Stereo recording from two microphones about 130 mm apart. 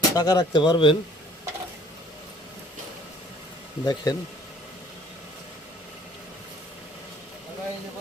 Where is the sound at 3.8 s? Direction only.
30° left (ahead or behind).